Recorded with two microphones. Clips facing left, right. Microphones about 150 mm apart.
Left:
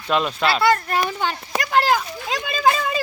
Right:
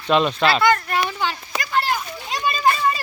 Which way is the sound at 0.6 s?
35° left (ahead or behind).